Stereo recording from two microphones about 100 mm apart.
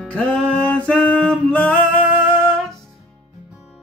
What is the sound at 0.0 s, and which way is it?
Music, 10° left (ahead or behind).